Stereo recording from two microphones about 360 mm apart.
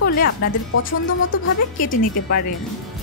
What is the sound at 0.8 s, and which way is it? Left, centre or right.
Speech, left.